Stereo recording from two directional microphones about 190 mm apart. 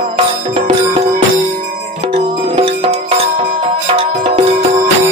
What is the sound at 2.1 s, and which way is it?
Music, 30° right (ahead or behind).